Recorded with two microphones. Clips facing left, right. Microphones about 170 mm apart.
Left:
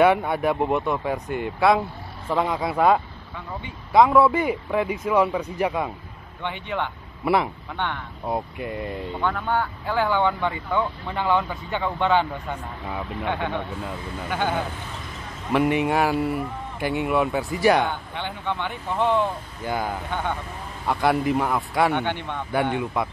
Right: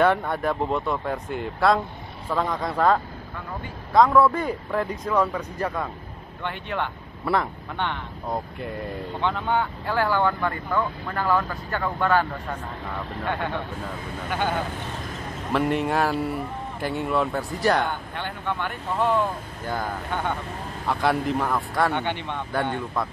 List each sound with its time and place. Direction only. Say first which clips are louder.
0.0 s speech: left 3 dB; 10° left (ahead or behind)
8.3 s speech: left 3 dB; 5° left (ahead or behind)
9.5 s speech: even; 10° right (ahead or behind); by 14.6 s 10° left (ahead or behind)
15.8 s speech: left 2 dB; 10° left (ahead or behind)
18.5 s speech: even; 5° right (ahead or behind)
19.6 s speech: left 3 dB; 10° left (ahead or behind)
22.0 s speech: left 1 dB; 15° right (ahead or behind)
22.5 s speech: left 4 dB; 10° left (ahead or behind)